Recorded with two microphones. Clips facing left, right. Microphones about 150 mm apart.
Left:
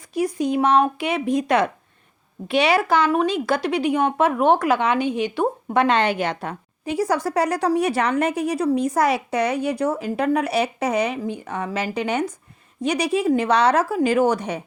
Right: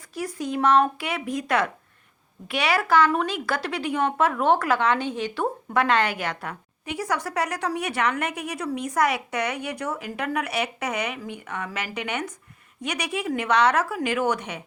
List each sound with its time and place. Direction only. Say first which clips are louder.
0.1 s speech: left 7 dB; 20° left (ahead or behind); by 14.6 s 35° left (ahead or behind)